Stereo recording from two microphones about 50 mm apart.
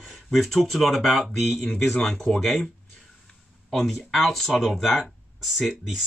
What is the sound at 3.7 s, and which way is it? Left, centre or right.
Speech, centre.